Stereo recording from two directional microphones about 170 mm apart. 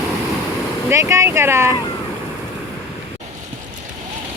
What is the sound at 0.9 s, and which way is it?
Speech, 15° right (ahead or behind).